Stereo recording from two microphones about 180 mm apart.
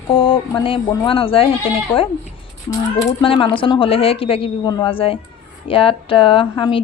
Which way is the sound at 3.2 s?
30° left (ahead or behind).